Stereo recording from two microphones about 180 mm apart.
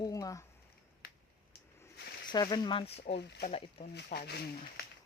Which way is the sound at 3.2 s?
70° left (ahead or behind).